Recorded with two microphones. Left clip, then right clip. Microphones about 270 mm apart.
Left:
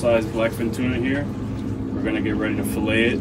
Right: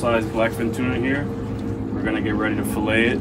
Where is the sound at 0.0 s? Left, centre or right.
Centre.